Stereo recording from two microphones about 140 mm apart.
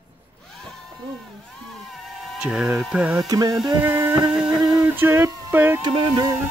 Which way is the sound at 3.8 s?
15° right (ahead or behind).